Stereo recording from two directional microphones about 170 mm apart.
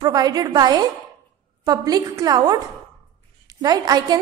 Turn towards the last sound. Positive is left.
turn(degrees=-20)  # may be behind; listen again after turning